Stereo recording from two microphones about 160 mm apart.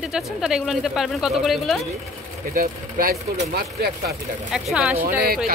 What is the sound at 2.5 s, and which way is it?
Speech, 65° right (ahead or behind).